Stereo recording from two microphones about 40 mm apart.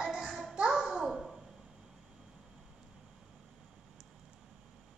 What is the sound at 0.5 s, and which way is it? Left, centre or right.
Babbling, centre.